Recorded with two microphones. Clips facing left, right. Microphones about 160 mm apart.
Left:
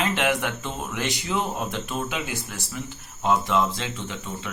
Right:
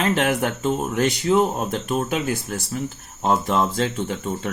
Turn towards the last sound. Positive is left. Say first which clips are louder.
# right 8 dB
turn(degrees=-45)  # may be behind; listen again after turning